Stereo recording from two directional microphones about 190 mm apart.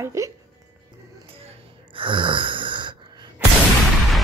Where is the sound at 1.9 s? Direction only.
25° right (ahead or behind).